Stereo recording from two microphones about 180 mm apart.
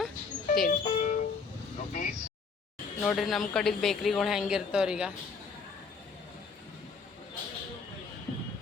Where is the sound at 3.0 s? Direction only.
Centre (ahead or behind).